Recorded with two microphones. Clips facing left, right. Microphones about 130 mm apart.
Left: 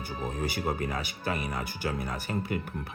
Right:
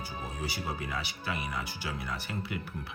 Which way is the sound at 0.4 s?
50° left (ahead or behind).